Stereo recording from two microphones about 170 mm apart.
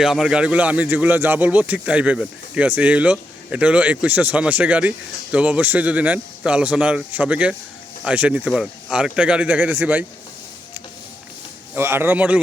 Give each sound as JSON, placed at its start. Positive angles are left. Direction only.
{"t": 0.0, "sound": "speech", "side_deg": -5}
{"t": 11.7, "sound": "speech", "side_deg": -15}